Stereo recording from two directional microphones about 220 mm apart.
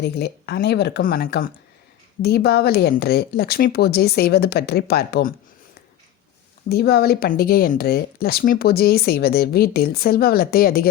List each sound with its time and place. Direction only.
0.0 s speech: 50° left (ahead or behind)
6.7 s speech: 45° left (ahead or behind)